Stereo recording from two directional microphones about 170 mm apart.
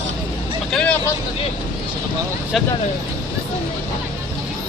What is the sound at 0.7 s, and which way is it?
Vehicle, 5° left (ahead or behind).